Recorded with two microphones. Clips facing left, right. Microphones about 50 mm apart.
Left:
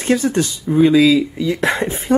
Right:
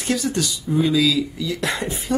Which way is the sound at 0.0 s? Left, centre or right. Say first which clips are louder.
Left 6 dB; left.